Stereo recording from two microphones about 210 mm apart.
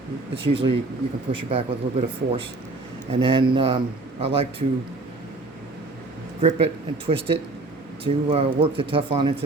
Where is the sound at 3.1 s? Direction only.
25° right (ahead or behind).